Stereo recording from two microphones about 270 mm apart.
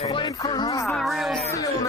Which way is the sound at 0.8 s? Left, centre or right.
Centre.